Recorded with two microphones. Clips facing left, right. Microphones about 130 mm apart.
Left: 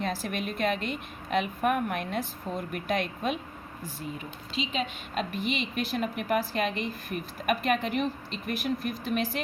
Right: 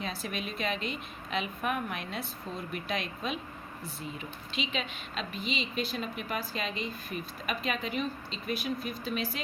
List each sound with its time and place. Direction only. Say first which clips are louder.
0.0 s a woman's voice: left 5 dB; 55° left (ahead or behind)
4.5 s a woman's voice: left 4 dB; 40° left (ahead or behind)